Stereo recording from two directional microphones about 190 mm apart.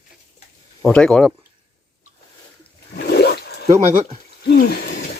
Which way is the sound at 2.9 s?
60° left (ahead or behind).